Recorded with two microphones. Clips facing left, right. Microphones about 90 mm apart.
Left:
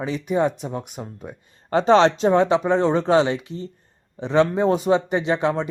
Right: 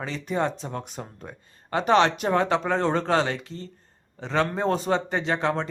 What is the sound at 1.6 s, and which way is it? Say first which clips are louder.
A man's voice: left 5 dB; 30° left (ahead or behind).